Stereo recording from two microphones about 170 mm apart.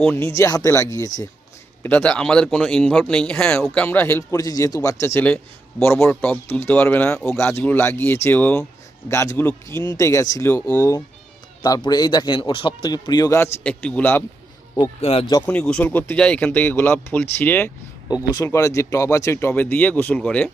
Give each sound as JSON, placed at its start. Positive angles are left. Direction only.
{"t": 0.3, "sound": "a man's voice", "side_deg": 20}
{"t": 14.8, "sound": "a man's voice", "side_deg": 35}
{"t": 15.4, "sound": "a man's voice", "side_deg": 5}